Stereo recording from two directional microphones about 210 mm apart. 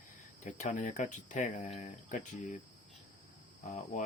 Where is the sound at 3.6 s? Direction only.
35° left (ahead or behind).